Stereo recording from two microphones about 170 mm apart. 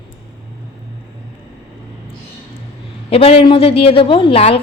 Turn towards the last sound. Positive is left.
turn(degrees=35)  # may be behind; listen again after turning